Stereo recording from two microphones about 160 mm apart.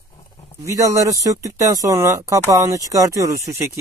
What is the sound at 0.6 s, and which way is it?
Speech, 20° right (ahead or behind).